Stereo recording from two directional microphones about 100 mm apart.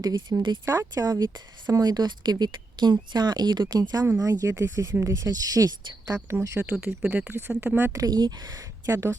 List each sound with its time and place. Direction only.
0.0 s a woman's voice: 40° right (ahead or behind)
0.6 s a woman's voice: 30° right (ahead or behind)
6.6 s speech: 15° right (ahead or behind)
7.9 s speech: 40° right (ahead or behind)